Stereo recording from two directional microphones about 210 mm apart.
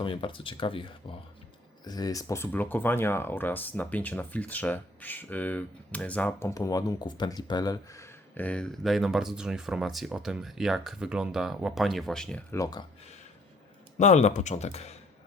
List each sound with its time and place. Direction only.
0.0 s speech: 25° left (ahead or behind); by 12.5 s 5° left (ahead or behind)
12.5 s speech: 15° left (ahead or behind)
14.0 s speech: 35° left (ahead or behind)